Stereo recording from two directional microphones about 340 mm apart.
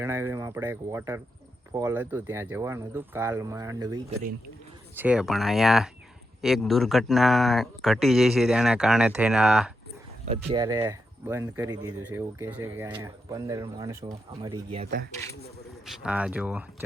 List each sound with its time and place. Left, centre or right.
0.0 s speech: centre
10.2 s speech: centre
14.8 s speech: right
15.1 s speech: centre
16.0 s speech: centre